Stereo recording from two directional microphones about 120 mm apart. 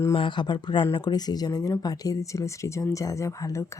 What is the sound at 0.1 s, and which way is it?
Speech, 45° left (ahead or behind).